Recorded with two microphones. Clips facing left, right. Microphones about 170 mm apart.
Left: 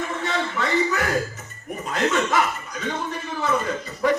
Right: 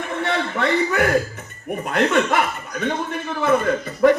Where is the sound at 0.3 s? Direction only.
60° right (ahead or behind).